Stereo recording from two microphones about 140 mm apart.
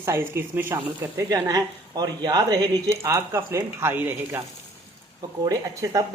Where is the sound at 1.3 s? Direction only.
25° right (ahead or behind).